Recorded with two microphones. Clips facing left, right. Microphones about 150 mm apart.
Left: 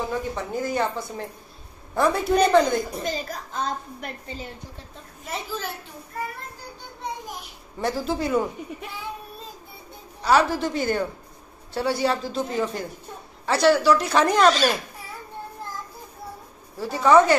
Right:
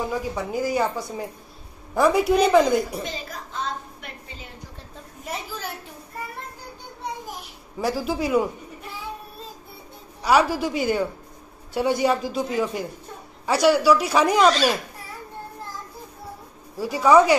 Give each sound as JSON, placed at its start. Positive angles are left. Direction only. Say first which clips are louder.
{"t": 0.1, "sound": "speech", "louder": "right 1 dB", "side_deg": -10}
{"t": 3.3, "sound": "a sound", "louder": "left 2 dB", "side_deg": 40}
{"t": 7.8, "sound": "speech", "louder": "right 1 dB", "side_deg": -5}
{"t": 10.2, "sound": "speech", "louder": "right 1 dB", "side_deg": -10}
{"t": 16.7, "sound": "speech", "louder": "right 1 dB", "side_deg": -10}